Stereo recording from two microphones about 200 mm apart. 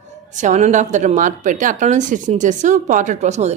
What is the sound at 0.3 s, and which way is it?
A woman's voice, 40° right (ahead or behind).